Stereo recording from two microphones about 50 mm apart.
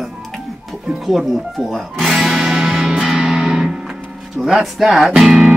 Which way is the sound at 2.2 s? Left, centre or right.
Centre.